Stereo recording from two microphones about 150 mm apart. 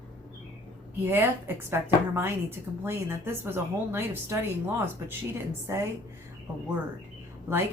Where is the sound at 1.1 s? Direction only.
15° right (ahead or behind).